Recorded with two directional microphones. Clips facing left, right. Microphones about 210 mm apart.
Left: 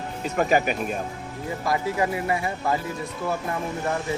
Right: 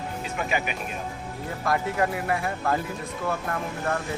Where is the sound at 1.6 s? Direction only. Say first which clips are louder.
Even; 5° left (ahead or behind).